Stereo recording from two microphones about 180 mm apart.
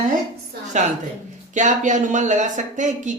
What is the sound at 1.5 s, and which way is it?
A woman's voice, 40° right (ahead or behind).